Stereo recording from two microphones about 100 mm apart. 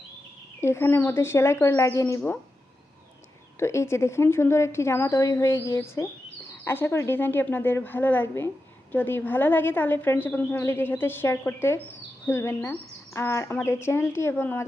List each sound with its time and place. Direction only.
0.6 s a woman's voice: 25° left (ahead or behind)
3.6 s a woman's voice: 30° left (ahead or behind)